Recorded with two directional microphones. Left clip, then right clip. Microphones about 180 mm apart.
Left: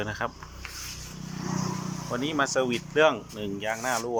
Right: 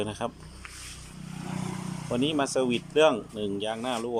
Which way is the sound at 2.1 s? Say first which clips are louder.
Even; 15° right (ahead or behind).